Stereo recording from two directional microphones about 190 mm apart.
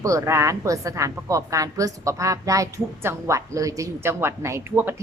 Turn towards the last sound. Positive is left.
turn(degrees=-10)  # may be behind; listen again after turning